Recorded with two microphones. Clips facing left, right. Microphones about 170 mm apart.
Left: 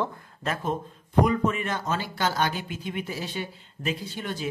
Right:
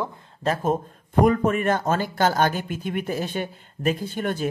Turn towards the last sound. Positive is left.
turn(degrees=-50)  # may be behind; listen again after turning